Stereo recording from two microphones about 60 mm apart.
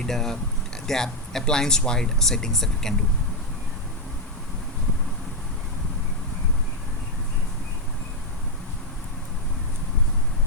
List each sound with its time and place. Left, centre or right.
0.0 s speech: centre